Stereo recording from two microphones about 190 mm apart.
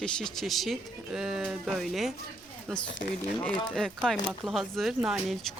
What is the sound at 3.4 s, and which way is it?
Speech, centre (ahead or behind).